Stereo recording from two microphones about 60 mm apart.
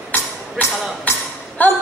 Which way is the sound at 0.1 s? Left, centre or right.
Left.